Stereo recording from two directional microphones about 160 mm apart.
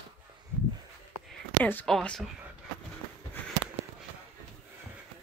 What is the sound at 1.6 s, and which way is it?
Speech, 10° left (ahead or behind).